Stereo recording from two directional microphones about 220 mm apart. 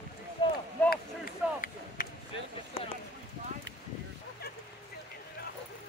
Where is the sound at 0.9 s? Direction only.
40° left (ahead or behind).